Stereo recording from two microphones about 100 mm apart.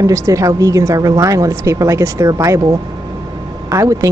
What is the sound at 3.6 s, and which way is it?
Speech, 35° right (ahead or behind).